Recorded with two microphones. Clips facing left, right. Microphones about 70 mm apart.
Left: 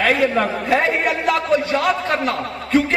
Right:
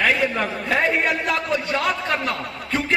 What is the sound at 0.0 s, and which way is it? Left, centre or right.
Speech, left.